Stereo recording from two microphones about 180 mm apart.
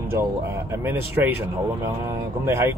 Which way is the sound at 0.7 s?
10° right (ahead or behind).